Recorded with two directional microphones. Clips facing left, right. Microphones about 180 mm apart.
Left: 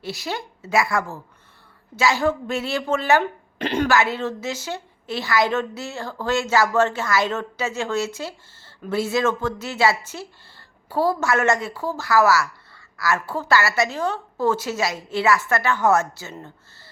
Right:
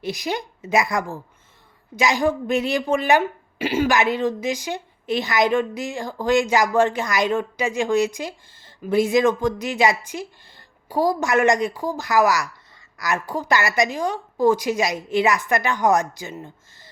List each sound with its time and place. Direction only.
0.0 s a woman's voice: 15° right (ahead or behind)